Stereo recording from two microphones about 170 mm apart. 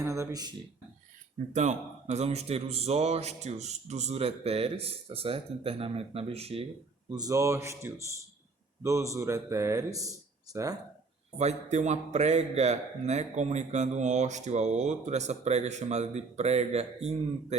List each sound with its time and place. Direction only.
0.0 s a sound: 15° right (ahead or behind)
1.5 s a man's voice: 40° right (ahead or behind)
7.1 s a man's voice: 20° right (ahead or behind)
11.3 s a man's voice: 40° right (ahead or behind)